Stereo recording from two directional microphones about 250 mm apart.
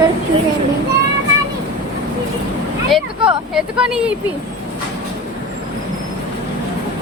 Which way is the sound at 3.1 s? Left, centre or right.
Centre.